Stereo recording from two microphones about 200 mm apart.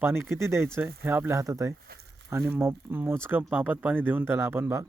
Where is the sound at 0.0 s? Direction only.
10° right (ahead or behind).